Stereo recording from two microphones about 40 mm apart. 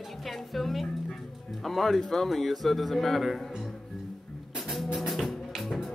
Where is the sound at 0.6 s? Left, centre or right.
Centre.